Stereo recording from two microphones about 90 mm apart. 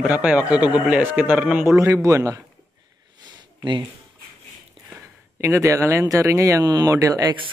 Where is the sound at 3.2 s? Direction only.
55° right (ahead or behind).